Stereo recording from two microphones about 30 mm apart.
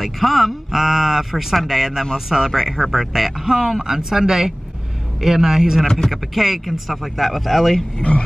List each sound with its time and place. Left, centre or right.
0.0 s speech: centre
3.5 s speech: centre
5.9 s speech: centre
6.3 s speech: centre
8.1 s frog: left